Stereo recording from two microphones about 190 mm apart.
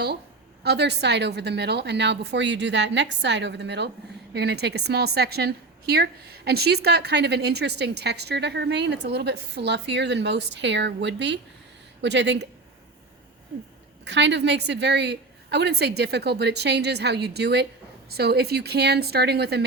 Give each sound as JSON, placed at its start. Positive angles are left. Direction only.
{"t": 0.6, "sound": "a woman's voice", "side_deg": -60}
{"t": 14.0, "sound": "a woman's voice", "side_deg": -70}